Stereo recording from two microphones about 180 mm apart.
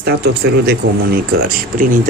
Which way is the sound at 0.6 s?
60° right (ahead or behind).